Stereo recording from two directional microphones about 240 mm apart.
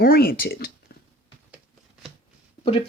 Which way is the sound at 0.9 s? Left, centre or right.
Left.